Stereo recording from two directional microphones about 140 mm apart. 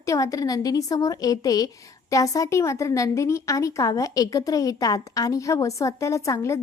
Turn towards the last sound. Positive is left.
turn(degrees=20)  # may be behind; listen again after turning